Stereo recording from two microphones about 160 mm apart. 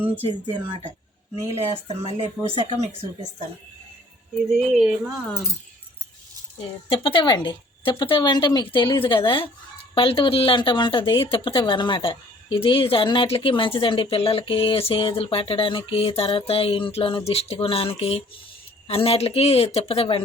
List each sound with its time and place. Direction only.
0.4 s speech: 30° right (ahead or behind)
4.8 s speech: centre (ahead or behind)
6.8 s speech: 35° left (ahead or behind)